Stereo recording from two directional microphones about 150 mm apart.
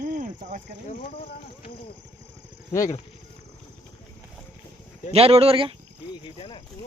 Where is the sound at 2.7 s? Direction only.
20° left (ahead or behind).